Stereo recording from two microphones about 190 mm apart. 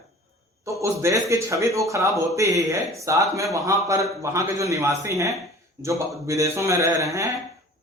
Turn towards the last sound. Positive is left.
turn(degrees=-15)  # may be behind; listen again after turning